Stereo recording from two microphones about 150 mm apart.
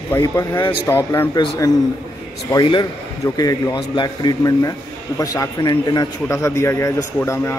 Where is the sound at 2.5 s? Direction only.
30° left (ahead or behind).